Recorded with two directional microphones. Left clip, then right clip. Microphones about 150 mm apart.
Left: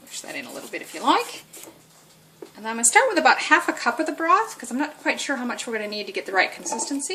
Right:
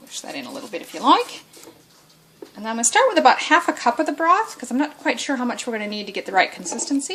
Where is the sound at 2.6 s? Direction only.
40° right (ahead or behind).